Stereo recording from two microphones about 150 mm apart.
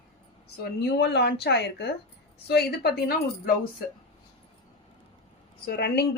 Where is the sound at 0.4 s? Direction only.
90° left.